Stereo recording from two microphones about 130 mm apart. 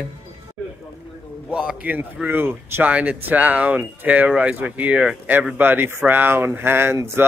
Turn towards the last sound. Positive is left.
turn(degrees=-20)  # may be behind; listen again after turning